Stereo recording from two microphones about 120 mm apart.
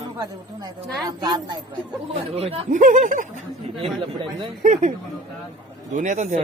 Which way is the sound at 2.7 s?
90° right.